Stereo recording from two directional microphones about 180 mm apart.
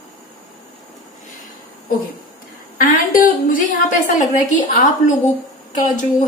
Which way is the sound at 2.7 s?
50° left (ahead or behind).